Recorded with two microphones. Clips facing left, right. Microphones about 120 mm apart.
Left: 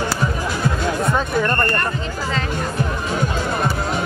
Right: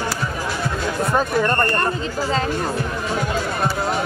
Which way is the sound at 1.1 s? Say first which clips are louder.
Right 1 dB; 15° right (ahead or behind).